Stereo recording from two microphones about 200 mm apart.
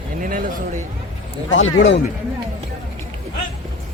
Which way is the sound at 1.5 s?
70° left (ahead or behind).